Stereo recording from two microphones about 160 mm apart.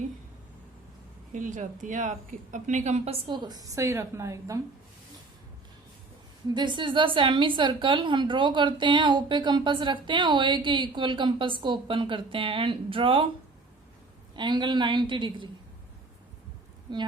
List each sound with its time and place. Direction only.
1.3 s speech: 50° right (ahead or behind)
3.2 s a woman's voice: 25° right (ahead or behind)
6.5 s a woman's voice: 30° right (ahead or behind)
14.3 s a woman's voice: 30° right (ahead or behind)
16.9 s a woman's voice: 30° right (ahead or behind)